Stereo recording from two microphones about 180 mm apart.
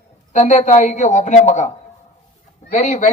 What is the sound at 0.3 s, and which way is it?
A man's voice, 40° left (ahead or behind).